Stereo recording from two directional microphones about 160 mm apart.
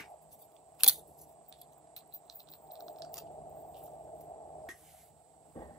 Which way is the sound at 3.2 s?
30° left (ahead or behind).